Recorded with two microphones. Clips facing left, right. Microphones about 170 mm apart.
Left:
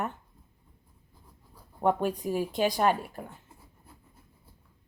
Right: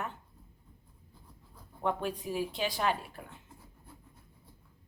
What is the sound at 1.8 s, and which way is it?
Speech, 45° left (ahead or behind).